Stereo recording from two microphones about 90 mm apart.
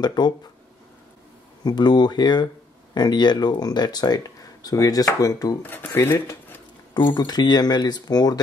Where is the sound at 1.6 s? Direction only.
50° left (ahead or behind).